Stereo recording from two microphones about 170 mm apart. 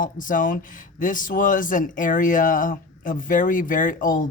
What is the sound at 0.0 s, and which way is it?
Speech, 50° left (ahead or behind).